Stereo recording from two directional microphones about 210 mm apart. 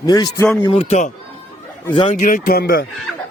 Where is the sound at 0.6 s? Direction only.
30° left (ahead or behind).